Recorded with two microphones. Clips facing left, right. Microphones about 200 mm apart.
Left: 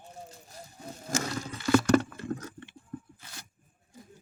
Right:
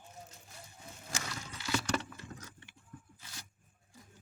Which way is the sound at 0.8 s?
45° left (ahead or behind).